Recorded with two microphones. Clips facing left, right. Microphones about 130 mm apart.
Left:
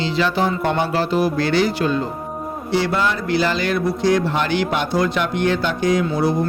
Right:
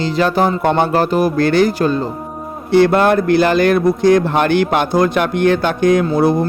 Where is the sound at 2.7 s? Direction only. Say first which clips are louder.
Right 9 dB; 55° right (ahead or behind).